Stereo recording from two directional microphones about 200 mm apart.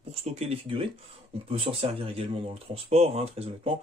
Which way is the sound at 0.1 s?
30° right (ahead or behind).